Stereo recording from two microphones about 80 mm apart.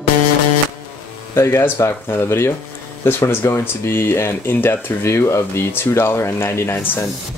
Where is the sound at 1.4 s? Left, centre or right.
Left.